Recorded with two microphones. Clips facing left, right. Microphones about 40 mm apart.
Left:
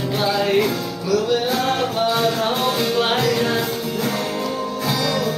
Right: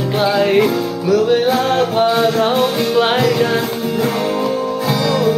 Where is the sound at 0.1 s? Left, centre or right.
Right.